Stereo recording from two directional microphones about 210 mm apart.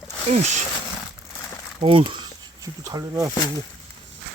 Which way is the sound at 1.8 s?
25° right (ahead or behind).